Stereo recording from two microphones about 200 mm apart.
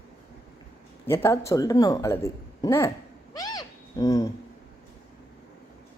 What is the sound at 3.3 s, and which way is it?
Cat, 20° left (ahead or behind).